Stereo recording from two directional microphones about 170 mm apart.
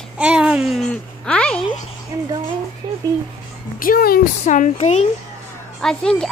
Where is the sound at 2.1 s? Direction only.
20° right (ahead or behind).